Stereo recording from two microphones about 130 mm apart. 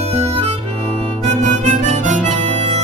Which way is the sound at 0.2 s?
50° right (ahead or behind).